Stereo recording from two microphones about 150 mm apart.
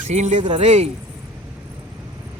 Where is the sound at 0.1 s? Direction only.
50° right (ahead or behind).